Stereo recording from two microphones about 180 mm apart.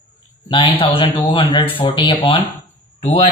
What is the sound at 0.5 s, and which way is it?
Speech, 30° left (ahead or behind).